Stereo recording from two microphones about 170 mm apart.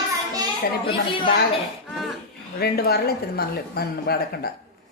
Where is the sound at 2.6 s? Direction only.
65° left (ahead or behind).